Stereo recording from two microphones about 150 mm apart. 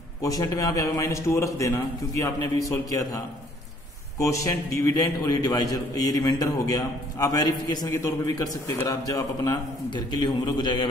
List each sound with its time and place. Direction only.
0.2 s a man's voice: 25° left (ahead or behind)
4.2 s a man's voice: 20° left (ahead or behind)